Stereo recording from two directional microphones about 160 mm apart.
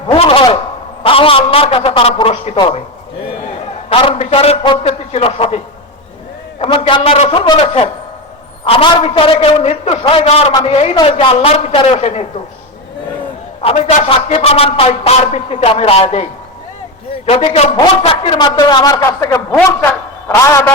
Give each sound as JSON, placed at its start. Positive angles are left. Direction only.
{"t": 0.1, "sound": "a sound", "side_deg": 35}
{"t": 1.0, "sound": "a man's voice", "side_deg": 35}
{"t": 3.8, "sound": "a man's voice", "side_deg": 35}
{"t": 6.6, "sound": "a man's voice", "side_deg": 35}
{"t": 13.6, "sound": "a man's voice", "side_deg": 40}
{"t": 17.2, "sound": "a man's voice", "side_deg": 40}
{"t": 19.5, "sound": "a man's voice", "side_deg": 10}